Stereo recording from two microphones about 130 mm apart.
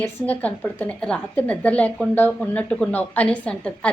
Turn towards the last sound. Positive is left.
turn(degrees=10)  # may be behind; listen again after turning